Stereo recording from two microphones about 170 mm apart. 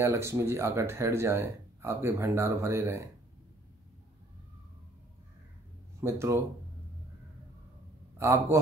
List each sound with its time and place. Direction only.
0.0 s speech: 15° right (ahead or behind)
5.9 s speech: 15° right (ahead or behind)
8.2 s speech: 15° right (ahead or behind)